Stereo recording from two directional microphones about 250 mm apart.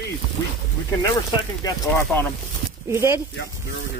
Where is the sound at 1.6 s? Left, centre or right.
Centre.